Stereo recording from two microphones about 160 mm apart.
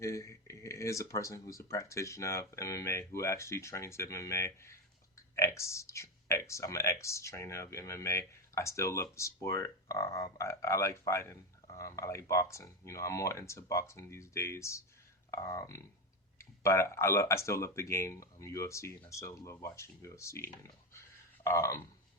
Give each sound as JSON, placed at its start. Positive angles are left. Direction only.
{"t": 0.0, "sound": "speech", "side_deg": 20}